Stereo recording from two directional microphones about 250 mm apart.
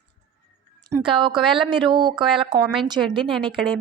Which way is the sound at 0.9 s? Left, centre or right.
Centre.